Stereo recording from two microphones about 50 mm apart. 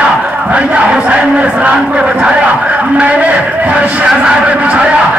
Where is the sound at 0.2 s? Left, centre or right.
Right.